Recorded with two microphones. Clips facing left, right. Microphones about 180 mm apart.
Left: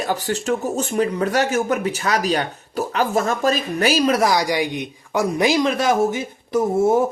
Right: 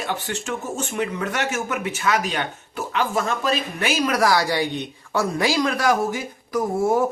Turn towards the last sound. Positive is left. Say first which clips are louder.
# left 4 dB
turn(degrees=25)  # may be behind; listen again after turning